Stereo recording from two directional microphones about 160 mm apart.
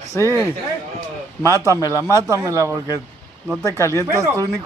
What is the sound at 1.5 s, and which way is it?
Speech, 20° left (ahead or behind).